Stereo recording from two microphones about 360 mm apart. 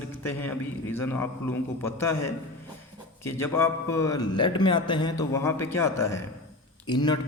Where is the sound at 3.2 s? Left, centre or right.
Centre.